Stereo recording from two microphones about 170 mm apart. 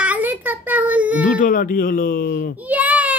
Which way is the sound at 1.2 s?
50° left (ahead or behind).